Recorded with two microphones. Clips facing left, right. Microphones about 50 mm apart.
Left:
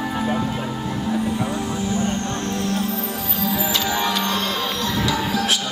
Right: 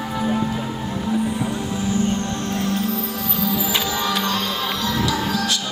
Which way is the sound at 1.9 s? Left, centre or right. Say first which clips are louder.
Right 3 dB; left.